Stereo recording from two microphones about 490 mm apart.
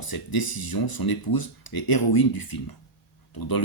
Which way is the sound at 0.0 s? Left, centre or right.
Left.